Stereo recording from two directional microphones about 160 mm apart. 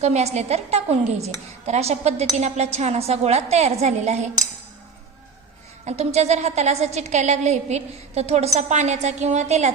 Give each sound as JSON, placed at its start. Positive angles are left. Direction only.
{"t": 0.0, "sound": "a woman's voice", "side_deg": -45}
{"t": 5.8, "sound": "a woman's voice", "side_deg": -45}